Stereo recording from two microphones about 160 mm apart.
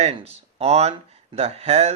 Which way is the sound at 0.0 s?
40° right (ahead or behind).